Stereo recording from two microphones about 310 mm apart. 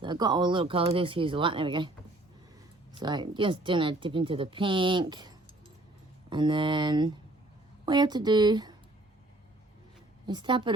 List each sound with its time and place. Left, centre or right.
0.0 s speech: centre
2.9 s speech: centre
10.2 s speech: centre